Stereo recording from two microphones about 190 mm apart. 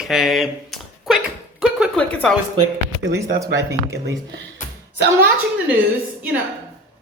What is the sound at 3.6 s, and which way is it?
Speech, 65° right (ahead or behind).